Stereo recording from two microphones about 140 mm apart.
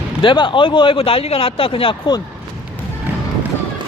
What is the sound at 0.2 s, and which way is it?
Speech, 35° left (ahead or behind).